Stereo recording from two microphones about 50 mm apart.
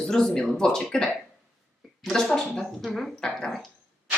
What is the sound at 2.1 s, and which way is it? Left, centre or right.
Speech, centre.